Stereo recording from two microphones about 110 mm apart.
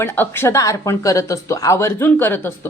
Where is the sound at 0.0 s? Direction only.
20° left (ahead or behind).